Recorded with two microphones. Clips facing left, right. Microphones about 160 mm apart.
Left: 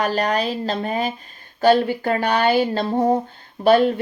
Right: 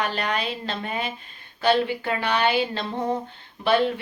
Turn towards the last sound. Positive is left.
turn(degrees=45)  # may be behind; listen again after turning